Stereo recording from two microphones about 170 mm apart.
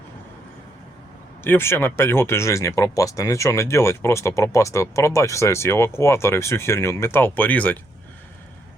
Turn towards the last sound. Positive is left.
turn(degrees=10)  # may be behind; listen again after turning